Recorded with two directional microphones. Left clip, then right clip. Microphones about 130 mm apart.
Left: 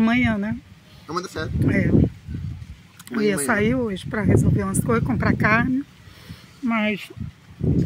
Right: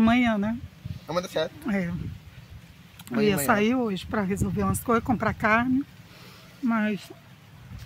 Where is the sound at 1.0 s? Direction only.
80° right.